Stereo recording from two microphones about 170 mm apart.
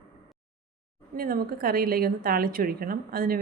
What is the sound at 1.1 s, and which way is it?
Speech, 60° right (ahead or behind).